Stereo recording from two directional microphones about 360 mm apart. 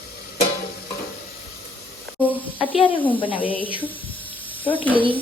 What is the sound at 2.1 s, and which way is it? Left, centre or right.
Speech, centre.